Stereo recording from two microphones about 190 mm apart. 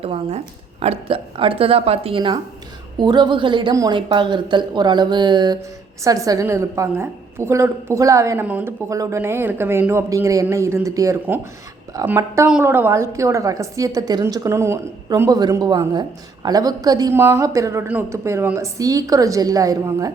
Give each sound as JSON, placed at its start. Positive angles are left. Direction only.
{"t": 0.0, "sound": "a woman's voice", "side_deg": -30}